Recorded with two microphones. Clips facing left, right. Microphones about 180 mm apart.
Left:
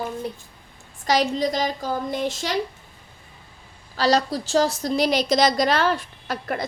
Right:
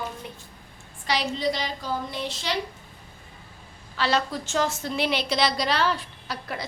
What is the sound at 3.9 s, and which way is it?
A woman's voice, 40° left (ahead or behind).